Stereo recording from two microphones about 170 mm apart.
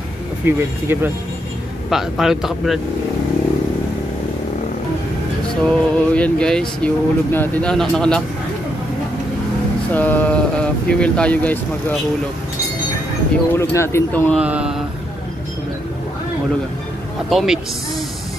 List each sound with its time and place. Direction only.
0.5 s a sound: 15° right (ahead or behind)
1.9 s speech: centre (ahead or behind)
5.6 s speech: 5° left (ahead or behind)
9.9 s speech: 10° left (ahead or behind)
13.6 s speech: 15° left (ahead or behind)
14.4 s a sound: 5° right (ahead or behind)
17.3 s speech: centre (ahead or behind)